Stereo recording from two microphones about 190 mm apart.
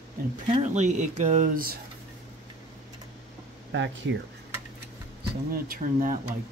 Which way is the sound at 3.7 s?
75° right (ahead or behind).